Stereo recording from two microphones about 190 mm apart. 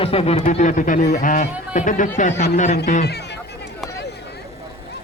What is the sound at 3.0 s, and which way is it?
Speech, 60° left (ahead or behind).